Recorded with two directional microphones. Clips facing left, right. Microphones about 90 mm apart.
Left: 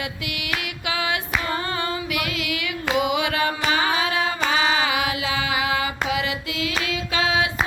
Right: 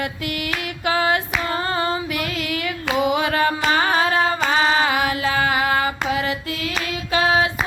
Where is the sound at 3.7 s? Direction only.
45° right (ahead or behind).